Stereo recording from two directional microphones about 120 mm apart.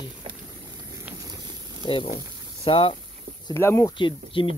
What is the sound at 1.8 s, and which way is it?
Speech, 45° left (ahead or behind).